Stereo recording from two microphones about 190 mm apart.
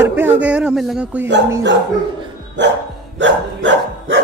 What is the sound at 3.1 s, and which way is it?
Dog, 75° right (ahead or behind).